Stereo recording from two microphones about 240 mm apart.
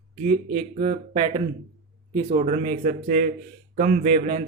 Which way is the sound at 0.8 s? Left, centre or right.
Right.